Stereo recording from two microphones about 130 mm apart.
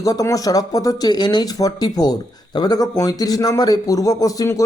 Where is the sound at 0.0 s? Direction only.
25° left (ahead or behind).